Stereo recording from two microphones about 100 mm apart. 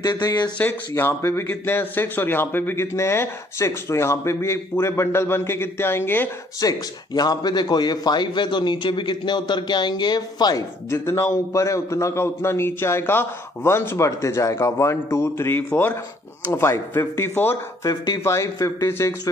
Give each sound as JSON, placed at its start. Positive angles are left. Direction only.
{"t": 0.0, "sound": "speech", "side_deg": 40}
{"t": 0.6, "sound": "a man's voice", "side_deg": 20}
{"t": 6.6, "sound": "a man's voice", "side_deg": 40}
{"t": 10.9, "sound": "a man's voice", "side_deg": 30}
{"t": 17.8, "sound": "speech", "side_deg": 35}